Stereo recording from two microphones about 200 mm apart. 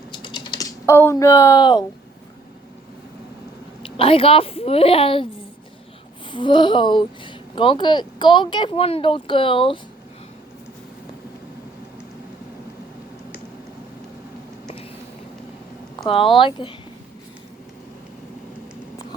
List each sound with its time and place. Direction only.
0.1 s typing: 25° left (ahead or behind)
3.8 s speech: 25° left (ahead or behind)
6.3 s speech: 25° left (ahead or behind)
16.0 s speech: 25° left (ahead or behind)